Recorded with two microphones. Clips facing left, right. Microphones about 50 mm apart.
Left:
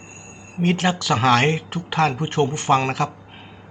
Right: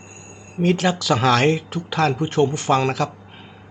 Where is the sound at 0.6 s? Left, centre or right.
Left.